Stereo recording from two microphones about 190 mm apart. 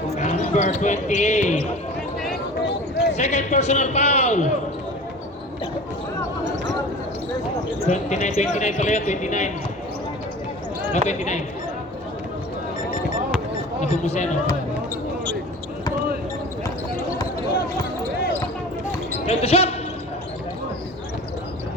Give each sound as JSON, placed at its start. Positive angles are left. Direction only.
{"t": 0.2, "sound": "speech", "side_deg": 40}
{"t": 3.2, "sound": "a man's voice", "side_deg": 35}
{"t": 7.9, "sound": "a man's voice", "side_deg": 40}
{"t": 10.9, "sound": "a man's voice", "side_deg": 40}
{"t": 13.8, "sound": "a man's voice", "side_deg": 35}
{"t": 19.2, "sound": "speech", "side_deg": 30}